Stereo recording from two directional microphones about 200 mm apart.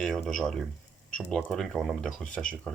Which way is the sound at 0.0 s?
Centre (ahead or behind).